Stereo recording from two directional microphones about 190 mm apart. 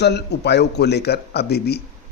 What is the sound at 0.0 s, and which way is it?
Speech, 60° left (ahead or behind).